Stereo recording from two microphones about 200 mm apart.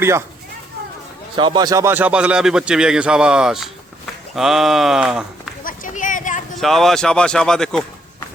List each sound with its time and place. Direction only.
0.0 s speech: 15° right (ahead or behind)
1.4 s speech: 20° right (ahead or behind); by 5.2 s 5° right (ahead or behind)
5.6 s a sound: 40° left (ahead or behind)
6.6 s speech: centre (ahead or behind)